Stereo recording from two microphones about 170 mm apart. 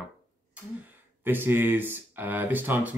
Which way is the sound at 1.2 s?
10° right (ahead or behind).